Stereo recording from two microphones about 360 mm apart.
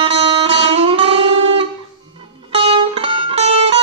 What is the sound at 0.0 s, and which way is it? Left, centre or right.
Music, centre.